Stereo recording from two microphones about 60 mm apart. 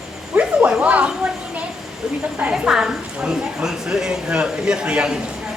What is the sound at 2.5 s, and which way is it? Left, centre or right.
A woman's voice, centre.